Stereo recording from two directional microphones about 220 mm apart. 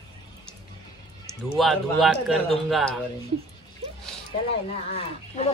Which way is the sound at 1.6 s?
Centre (ahead or behind).